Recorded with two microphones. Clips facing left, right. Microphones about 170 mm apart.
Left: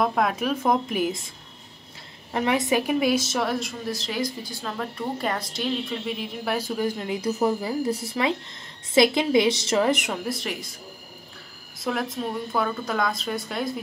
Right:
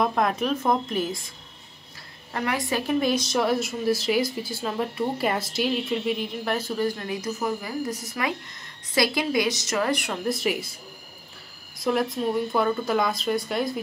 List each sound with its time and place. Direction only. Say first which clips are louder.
0.0 s speech: even; centre (ahead or behind)
2.3 s a woman's voice: left 4 dB; 20° left (ahead or behind); by 6.6 s 5° left (ahead or behind)
6.8 s a woman's voice: even; 20° left (ahead or behind)
7.2 s a woman's voice: left 5 dB; 30° left (ahead or behind)
10.2 s a woman's voice: right 4 dB; 5° right (ahead or behind)
11.8 s a woman's voice: right 3 dB; centre (ahead or behind)